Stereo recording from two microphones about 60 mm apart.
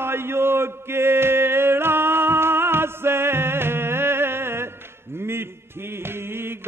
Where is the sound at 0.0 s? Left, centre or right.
Right.